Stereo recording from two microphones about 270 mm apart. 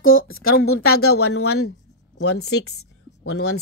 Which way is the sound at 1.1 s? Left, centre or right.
Left.